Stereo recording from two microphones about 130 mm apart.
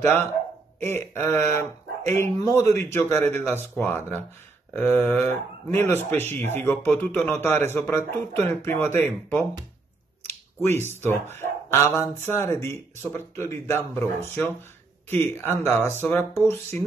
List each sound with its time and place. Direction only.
0.0 s speech: 15° left (ahead or behind)
10.8 s speech: 15° left (ahead or behind)